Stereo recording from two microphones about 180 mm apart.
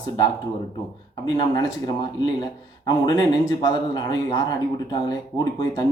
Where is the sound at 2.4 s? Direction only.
25° left (ahead or behind).